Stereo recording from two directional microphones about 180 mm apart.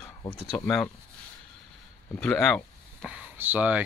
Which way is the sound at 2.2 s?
5° left (ahead or behind).